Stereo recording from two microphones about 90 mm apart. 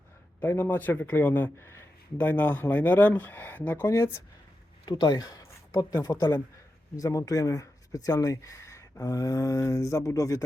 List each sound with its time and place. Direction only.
0.3 s speech: 25° left (ahead or behind)
3.8 s speech: 30° left (ahead or behind)
4.9 s speech: 55° left (ahead or behind)